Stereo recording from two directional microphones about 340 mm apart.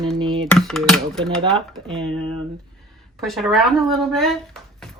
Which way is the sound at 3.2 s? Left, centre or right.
Centre.